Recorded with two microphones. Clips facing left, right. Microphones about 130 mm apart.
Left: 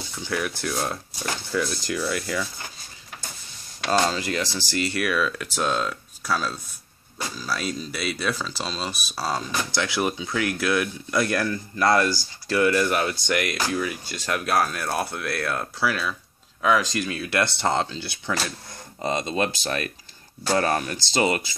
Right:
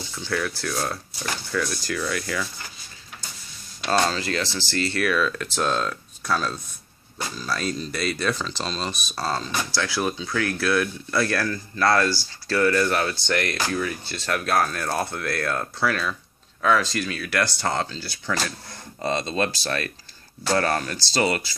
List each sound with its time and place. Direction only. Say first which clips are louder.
0.2 s speech: even; 15° left (ahead or behind)
2.0 s speech: left 1 dB; 10° left (ahead or behind)
3.9 s speech: even; 10° left (ahead or behind)